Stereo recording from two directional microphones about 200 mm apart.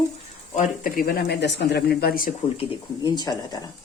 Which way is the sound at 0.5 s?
50° left (ahead or behind).